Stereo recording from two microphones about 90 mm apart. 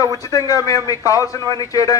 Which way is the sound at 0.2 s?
40° left (ahead or behind).